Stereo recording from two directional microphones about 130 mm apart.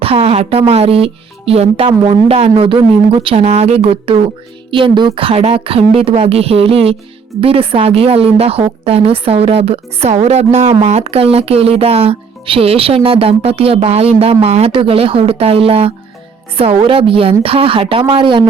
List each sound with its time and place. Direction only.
0.0 s a woman's voice: 50° right (ahead or behind)